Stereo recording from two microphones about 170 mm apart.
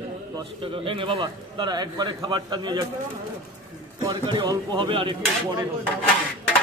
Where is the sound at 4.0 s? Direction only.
25° right (ahead or behind).